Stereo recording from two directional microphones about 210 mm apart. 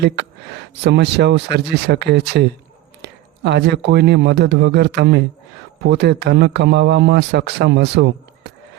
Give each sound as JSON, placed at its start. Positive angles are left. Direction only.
{"t": 0.8, "sound": "a man's voice", "side_deg": -55}